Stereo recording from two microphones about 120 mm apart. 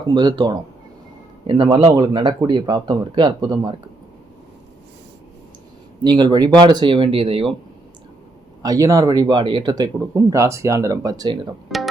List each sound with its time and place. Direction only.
0.0 s speech: 35° right (ahead or behind)
6.0 s speech: 35° right (ahead or behind)
8.6 s speech: 30° right (ahead or behind)